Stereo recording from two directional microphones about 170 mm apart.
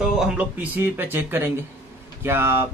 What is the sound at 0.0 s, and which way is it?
Speech, 5° right (ahead or behind).